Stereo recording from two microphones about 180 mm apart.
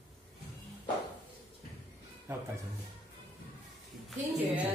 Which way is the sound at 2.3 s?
15° right (ahead or behind).